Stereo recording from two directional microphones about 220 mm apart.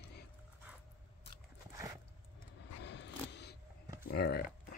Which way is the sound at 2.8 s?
50° left (ahead or behind).